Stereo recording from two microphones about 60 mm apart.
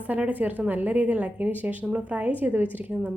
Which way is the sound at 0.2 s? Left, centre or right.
Right.